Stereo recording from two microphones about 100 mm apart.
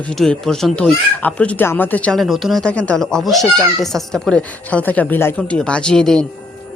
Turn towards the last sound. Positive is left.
turn(degrees=5)  # may be behind; listen again after turning